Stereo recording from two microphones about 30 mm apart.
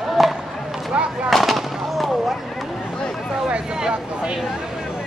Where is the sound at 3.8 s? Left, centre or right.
Right.